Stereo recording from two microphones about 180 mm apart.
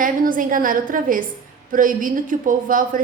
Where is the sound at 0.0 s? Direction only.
50° right (ahead or behind).